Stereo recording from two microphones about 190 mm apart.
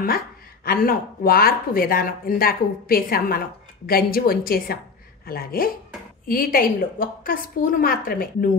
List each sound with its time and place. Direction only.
0.7 s speech: 55° left (ahead or behind)